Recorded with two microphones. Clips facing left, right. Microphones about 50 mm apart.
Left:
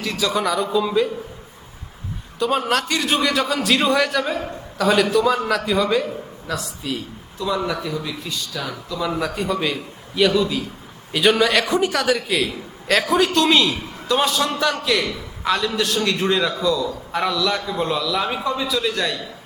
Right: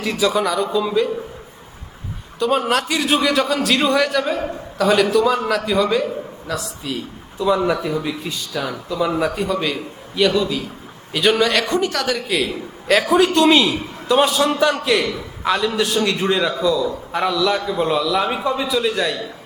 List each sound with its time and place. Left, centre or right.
0.0 s a man's voice: centre
2.4 s a man's voice: centre
7.3 s a man's voice: centre
9.3 s a man's voice: centre